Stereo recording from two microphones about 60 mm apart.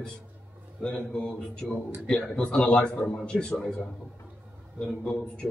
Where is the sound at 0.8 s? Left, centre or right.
Centre.